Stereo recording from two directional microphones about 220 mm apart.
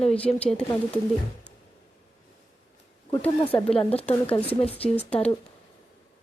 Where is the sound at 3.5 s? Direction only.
25° left (ahead or behind).